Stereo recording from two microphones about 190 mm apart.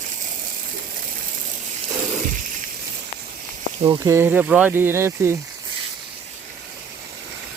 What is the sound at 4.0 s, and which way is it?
Speech, 15° right (ahead or behind).